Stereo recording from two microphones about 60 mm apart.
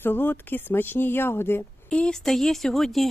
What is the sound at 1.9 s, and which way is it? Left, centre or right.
Speech, centre.